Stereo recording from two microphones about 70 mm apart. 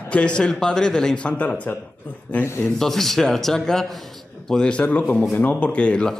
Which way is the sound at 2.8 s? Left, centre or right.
Centre.